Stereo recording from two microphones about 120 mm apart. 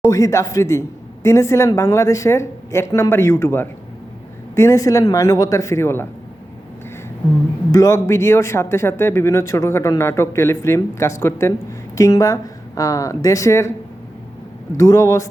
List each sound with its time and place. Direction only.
0.1 s speech: 25° left (ahead or behind)
7.7 s speech: 25° left (ahead or behind)
14.8 s speech: 25° left (ahead or behind)